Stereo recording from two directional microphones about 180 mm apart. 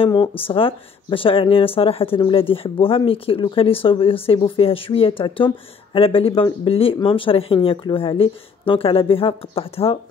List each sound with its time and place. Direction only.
0.0 s speech: 30° left (ahead or behind)